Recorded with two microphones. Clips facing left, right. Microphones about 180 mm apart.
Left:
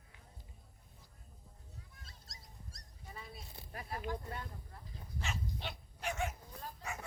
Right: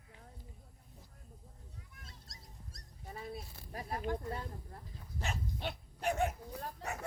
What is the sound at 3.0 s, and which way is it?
Speech, 45° right (ahead or behind).